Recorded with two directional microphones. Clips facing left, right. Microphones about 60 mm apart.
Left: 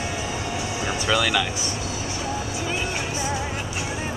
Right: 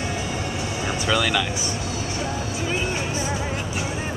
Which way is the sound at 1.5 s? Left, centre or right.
Centre.